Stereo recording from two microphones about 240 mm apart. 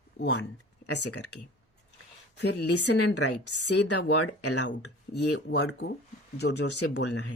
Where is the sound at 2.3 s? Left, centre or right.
Left.